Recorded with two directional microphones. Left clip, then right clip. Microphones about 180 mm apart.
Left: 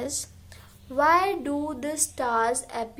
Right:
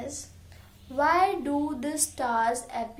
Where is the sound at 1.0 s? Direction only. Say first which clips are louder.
Left 2 dB; 15° left (ahead or behind).